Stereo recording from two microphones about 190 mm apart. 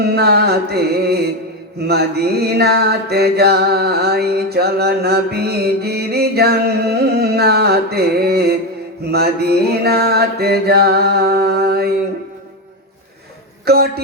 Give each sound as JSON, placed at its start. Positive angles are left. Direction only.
{"t": 0.0, "sound": "mantra", "side_deg": -55}
{"t": 13.7, "sound": "mantra", "side_deg": -55}